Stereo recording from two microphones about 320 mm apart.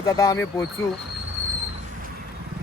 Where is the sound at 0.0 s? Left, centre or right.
Centre.